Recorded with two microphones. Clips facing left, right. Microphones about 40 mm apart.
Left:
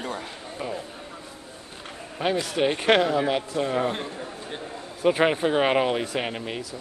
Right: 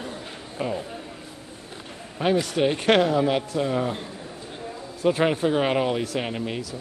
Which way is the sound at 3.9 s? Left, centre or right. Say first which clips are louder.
Left 2 dB; left.